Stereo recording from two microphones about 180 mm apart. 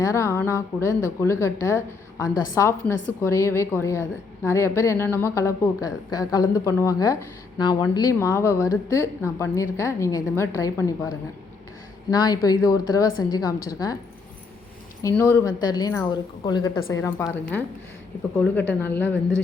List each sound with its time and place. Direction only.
0.0 s a woman's voice: 15° left (ahead or behind)
15.1 s a woman's voice: 10° left (ahead or behind)